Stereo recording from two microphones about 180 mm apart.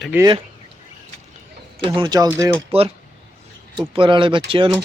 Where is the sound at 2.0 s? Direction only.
20° right (ahead or behind).